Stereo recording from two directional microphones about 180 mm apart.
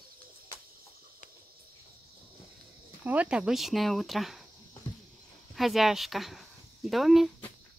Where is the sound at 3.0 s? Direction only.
10° right (ahead or behind).